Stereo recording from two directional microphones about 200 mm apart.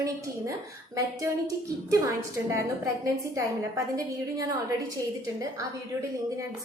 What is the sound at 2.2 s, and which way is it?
A woman's voice, 15° right (ahead or behind).